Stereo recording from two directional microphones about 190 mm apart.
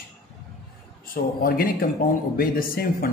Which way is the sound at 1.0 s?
50° left (ahead or behind).